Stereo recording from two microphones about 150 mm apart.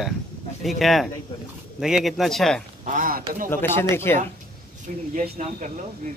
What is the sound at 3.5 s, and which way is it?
Speech, 15° left (ahead or behind).